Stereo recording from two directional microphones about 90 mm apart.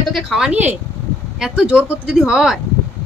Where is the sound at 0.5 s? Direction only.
20° right (ahead or behind).